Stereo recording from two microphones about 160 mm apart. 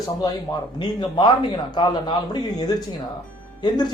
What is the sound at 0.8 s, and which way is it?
Speech, 30° left (ahead or behind).